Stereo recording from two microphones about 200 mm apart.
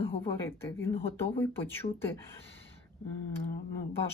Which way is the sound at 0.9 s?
30° left (ahead or behind).